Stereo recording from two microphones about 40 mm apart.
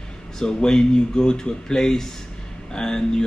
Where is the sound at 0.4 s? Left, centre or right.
Centre.